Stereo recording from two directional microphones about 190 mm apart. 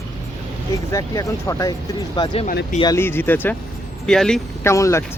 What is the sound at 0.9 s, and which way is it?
Speech, 15° left (ahead or behind).